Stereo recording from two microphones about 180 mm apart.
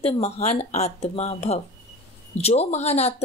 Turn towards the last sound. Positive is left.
turn(degrees=35)  # may be behind; listen again after turning